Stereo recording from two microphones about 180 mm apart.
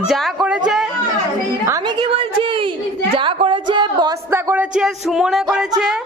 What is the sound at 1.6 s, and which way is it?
A woman's voice, 20° right (ahead or behind).